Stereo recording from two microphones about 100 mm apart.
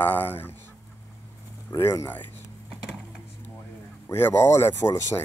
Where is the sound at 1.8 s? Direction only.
25° left (ahead or behind).